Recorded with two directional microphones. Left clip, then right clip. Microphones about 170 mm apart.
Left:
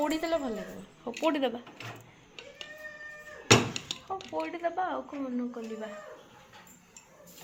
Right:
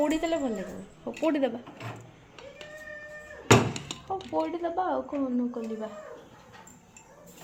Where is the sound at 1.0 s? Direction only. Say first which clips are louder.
Right 2 dB; centre (ahead or behind).